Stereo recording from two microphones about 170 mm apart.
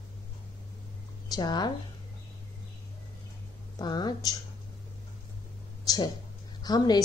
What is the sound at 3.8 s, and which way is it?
Speech, 25° left (ahead or behind).